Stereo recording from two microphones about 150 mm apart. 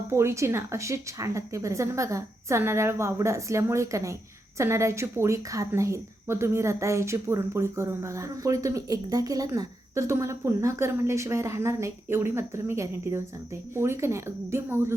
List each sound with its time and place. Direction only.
0.1 s a woman's voice: 20° right (ahead or behind)